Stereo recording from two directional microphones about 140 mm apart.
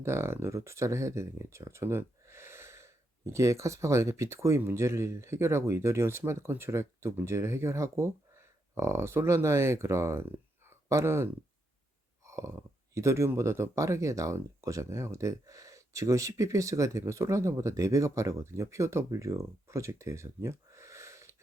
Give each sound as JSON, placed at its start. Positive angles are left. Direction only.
{"t": 0.0, "sound": "speech", "side_deg": -20}